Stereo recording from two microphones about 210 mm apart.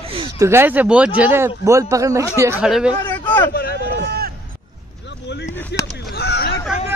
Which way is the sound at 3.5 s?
45° left (ahead or behind).